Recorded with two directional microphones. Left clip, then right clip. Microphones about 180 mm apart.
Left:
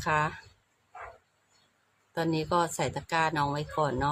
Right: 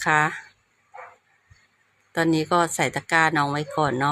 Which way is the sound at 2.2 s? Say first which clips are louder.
Right 7 dB; 20° right (ahead or behind).